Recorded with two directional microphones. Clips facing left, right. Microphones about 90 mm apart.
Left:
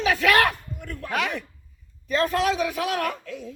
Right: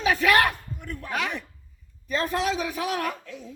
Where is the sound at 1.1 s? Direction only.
Centre (ahead or behind).